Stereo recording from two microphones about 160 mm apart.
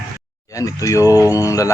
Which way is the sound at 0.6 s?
20° left (ahead or behind).